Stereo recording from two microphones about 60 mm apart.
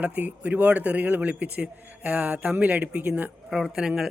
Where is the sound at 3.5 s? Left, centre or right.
Centre.